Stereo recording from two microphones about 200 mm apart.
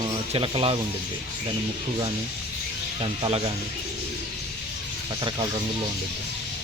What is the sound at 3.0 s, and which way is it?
Speech, 25° right (ahead or behind).